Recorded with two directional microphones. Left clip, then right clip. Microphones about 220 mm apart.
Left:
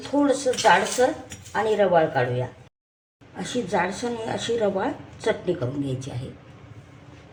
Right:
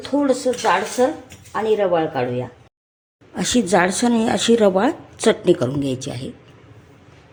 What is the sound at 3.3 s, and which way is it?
Speech, 50° right (ahead or behind).